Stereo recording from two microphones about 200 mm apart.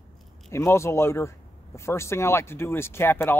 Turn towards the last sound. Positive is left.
turn(degrees=10)  # may be behind; listen again after turning